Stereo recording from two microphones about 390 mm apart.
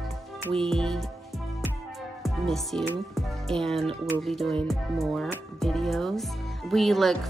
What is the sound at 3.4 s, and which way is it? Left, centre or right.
Speech, centre.